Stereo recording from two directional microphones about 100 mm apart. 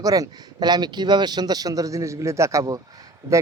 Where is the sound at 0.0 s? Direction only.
35° right (ahead or behind).